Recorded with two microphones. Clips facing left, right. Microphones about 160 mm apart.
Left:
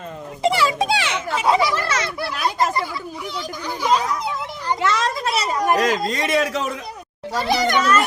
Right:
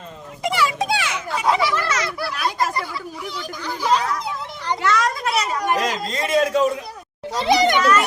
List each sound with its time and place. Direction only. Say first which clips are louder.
0.4 s a sound: left 3 dB; 30° left (ahead or behind)
1.5 s fowl: left 2 dB; 35° left (ahead or behind)
3.6 s a child's voice: even; 15° left (ahead or behind)
4.8 s a sound: right 1 dB; 25° left (ahead or behind)
5.8 s a man's voice: left 3 dB; 65° left (ahead or behind)
7.3 s a child's voice: right 3 dB; 20° right (ahead or behind)